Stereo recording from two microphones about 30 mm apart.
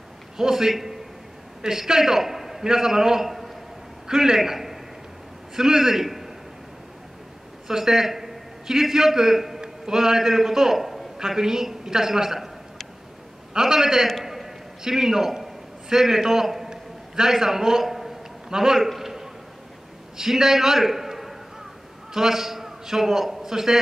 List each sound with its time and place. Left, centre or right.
0.4 s a man's voice: centre
7.6 s a man's voice: centre
13.5 s a man's voice: centre
14.2 s a sound: centre
18.5 s a man's voice: centre
18.8 s a sound: centre
20.2 s a man's voice: centre